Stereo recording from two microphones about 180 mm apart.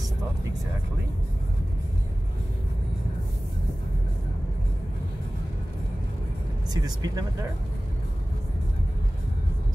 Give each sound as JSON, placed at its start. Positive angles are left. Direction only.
{"t": 6.7, "sound": "speech", "side_deg": -20}